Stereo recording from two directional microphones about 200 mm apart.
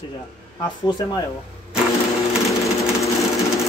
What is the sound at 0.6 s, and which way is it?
Speech, 20° left (ahead or behind).